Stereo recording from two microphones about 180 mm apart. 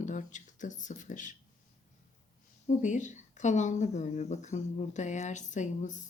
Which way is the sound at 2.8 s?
45° left (ahead or behind).